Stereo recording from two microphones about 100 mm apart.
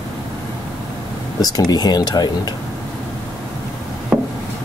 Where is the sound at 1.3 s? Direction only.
40° left (ahead or behind).